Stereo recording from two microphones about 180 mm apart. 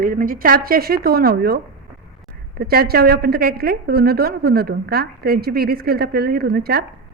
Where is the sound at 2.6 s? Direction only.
60° right (ahead or behind).